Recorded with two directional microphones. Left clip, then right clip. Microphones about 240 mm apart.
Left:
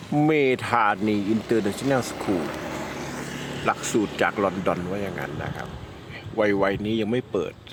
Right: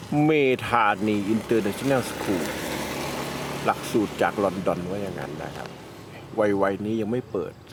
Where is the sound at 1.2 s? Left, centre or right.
Right.